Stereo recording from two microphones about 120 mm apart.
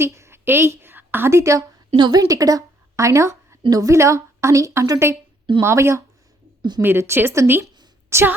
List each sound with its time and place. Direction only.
0.0 s a woman's voice: 20° right (ahead or behind)
2.0 s a woman's voice: 35° right (ahead or behind)
6.6 s a woman's voice: 35° right (ahead or behind)
6.8 s a woman's voice: 20° right (ahead or behind)